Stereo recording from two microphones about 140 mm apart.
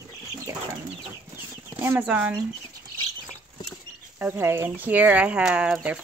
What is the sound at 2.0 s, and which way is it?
Speech, 10° right (ahead or behind).